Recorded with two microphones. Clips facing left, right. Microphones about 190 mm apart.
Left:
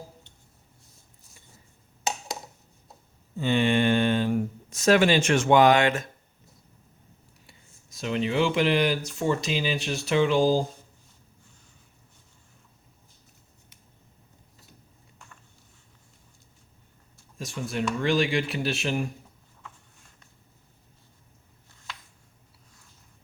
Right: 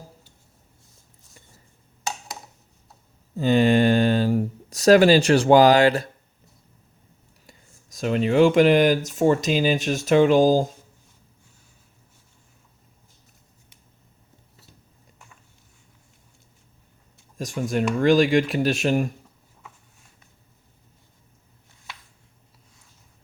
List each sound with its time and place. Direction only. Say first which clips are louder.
3.3 s speech: right 5 dB; 40° right (ahead or behind)
7.4 s speech: right 3 dB; 40° right (ahead or behind)
17.3 s speech: right 6 dB; 45° right (ahead or behind)